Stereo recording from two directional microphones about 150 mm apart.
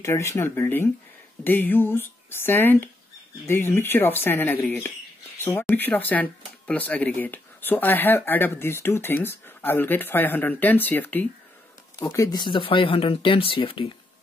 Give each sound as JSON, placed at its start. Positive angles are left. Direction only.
{"t": 0.0, "sound": "speech", "side_deg": 20}